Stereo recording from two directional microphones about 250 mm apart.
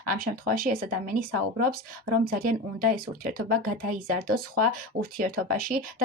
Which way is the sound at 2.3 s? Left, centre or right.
Right.